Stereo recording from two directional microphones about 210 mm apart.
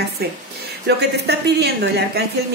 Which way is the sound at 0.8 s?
50° right (ahead or behind).